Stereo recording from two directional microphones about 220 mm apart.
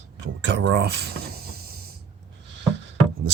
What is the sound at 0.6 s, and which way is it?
Mechanisms, 50° right (ahead or behind).